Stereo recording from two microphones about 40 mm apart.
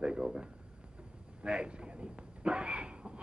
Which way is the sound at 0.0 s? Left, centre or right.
Right.